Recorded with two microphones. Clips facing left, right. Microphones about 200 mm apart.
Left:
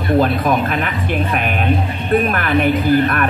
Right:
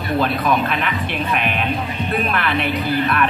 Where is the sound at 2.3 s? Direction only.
45° left (ahead or behind).